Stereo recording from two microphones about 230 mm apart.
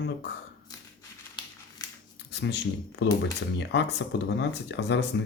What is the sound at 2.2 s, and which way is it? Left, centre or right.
Speech, left.